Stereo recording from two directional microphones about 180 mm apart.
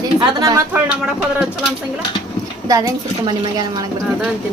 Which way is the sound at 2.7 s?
20° right (ahead or behind).